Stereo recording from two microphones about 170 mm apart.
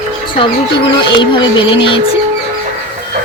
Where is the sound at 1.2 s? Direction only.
30° left (ahead or behind).